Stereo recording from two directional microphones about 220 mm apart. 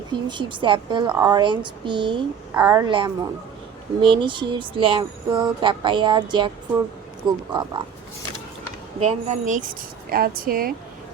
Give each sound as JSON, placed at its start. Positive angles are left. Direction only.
{"t": 0.1, "sound": "a woman's voice", "side_deg": -20}
{"t": 7.5, "sound": "speech", "side_deg": -20}
{"t": 9.0, "sound": "speech", "side_deg": -30}